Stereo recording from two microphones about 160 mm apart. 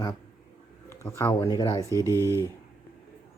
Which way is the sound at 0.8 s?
15° left (ahead or behind).